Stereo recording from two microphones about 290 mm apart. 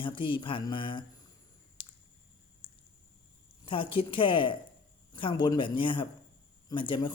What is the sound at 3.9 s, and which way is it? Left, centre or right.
Speech, centre.